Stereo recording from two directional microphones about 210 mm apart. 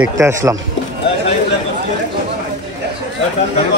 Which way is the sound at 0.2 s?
15° right (ahead or behind).